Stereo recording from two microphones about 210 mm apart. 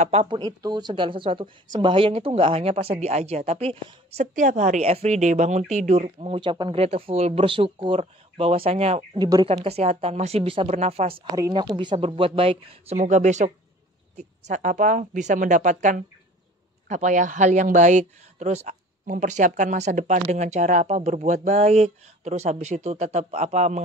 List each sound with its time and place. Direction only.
0.0 s speech: 30° right (ahead or behind)
0.4 s speech: 20° right (ahead or behind)
11.3 s speech: 15° right (ahead or behind); by 23.8 s 35° right (ahead or behind)